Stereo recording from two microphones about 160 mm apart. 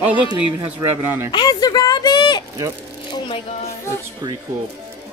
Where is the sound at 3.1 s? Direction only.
35° left (ahead or behind).